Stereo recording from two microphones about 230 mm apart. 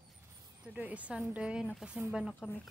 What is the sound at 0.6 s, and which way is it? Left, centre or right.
Speech, centre.